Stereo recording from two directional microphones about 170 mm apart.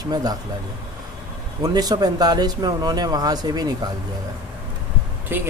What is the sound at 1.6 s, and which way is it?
Speech, 25° right (ahead or behind).